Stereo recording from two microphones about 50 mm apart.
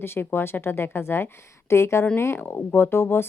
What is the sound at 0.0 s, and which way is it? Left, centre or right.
A woman's voice, left.